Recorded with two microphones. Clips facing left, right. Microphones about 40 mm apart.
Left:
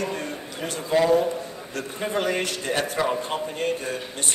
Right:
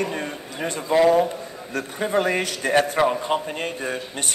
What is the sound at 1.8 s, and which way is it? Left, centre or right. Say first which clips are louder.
A man's voice: right 4 dB; right.